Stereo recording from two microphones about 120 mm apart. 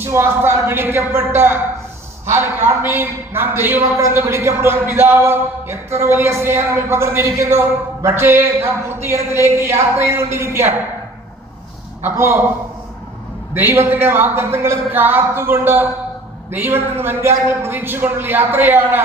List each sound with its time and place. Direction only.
0.0 s a man's voice: 20° right (ahead or behind)
12.0 s a man's voice: 20° right (ahead or behind)
13.5 s a man's voice: 20° right (ahead or behind)